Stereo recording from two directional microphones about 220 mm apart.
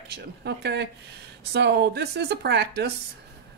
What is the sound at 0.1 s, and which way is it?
Speech, 50° right (ahead or behind).